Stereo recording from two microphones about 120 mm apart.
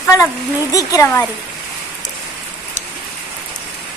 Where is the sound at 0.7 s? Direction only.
30° left (ahead or behind).